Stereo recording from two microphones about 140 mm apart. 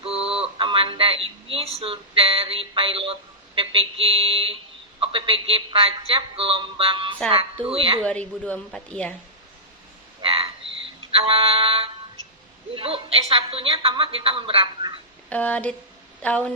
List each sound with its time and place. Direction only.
0.0 s a sound: 45° right (ahead or behind)
4.9 s a woman's voice: 40° right (ahead or behind)
8.0 s speech: 10° left (ahead or behind)
10.2 s frog: 40° right (ahead or behind)
11.3 s a woman's voice: 40° right (ahead or behind)
15.3 s speech: 10° left (ahead or behind)